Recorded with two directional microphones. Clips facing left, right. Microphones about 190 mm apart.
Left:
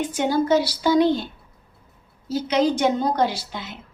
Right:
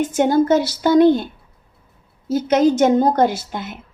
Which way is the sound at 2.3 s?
50° right (ahead or behind).